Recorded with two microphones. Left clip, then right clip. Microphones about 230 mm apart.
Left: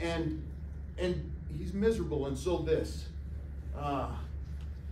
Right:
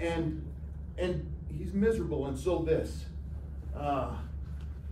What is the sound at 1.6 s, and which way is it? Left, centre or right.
A man's voice, centre.